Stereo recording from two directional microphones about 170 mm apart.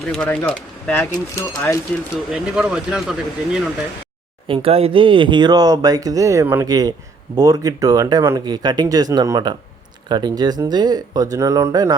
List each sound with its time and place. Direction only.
0.1 s speech: 5° left (ahead or behind)
2.3 s speech: 5° right (ahead or behind)
4.4 s speech: 35° right (ahead or behind)